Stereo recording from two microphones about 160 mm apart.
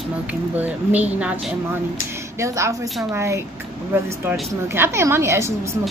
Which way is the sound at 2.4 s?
20° right (ahead or behind).